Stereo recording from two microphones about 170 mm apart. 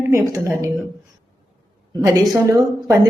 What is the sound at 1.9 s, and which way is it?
A woman's voice, 15° right (ahead or behind).